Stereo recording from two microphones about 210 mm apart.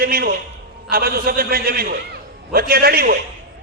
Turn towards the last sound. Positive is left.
turn(degrees=-45)  # may be behind; listen again after turning